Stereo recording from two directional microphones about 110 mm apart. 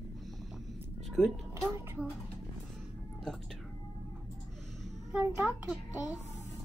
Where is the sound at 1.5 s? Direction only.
25° right (ahead or behind).